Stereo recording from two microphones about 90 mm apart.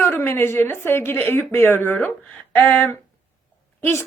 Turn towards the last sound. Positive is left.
turn(degrees=25)  # may be behind; listen again after turning